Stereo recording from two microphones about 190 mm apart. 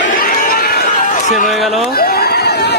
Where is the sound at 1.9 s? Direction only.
55° left (ahead or behind).